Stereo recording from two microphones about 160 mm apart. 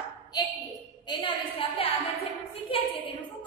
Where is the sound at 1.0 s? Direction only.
30° left (ahead or behind).